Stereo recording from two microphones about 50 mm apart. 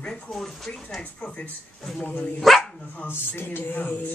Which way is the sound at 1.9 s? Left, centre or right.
Centre.